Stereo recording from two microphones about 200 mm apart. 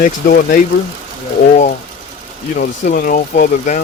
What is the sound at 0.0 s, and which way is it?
Speech, 45° left (ahead or behind).